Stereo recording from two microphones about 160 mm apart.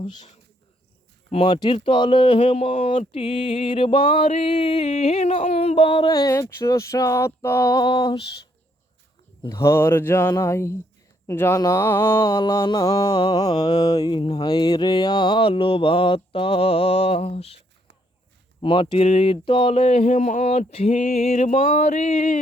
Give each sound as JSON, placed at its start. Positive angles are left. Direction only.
{"t": 1.3, "sound": "speech", "side_deg": 40}
{"t": 9.4, "sound": "speech", "side_deg": 20}
{"t": 11.3, "sound": "mantra", "side_deg": 15}
{"t": 13.6, "sound": "mantra", "side_deg": 25}
{"t": 14.4, "sound": "speech", "side_deg": 30}
{"t": 18.6, "sound": "speech", "side_deg": 35}
{"t": 19.0, "sound": "a sound", "side_deg": 40}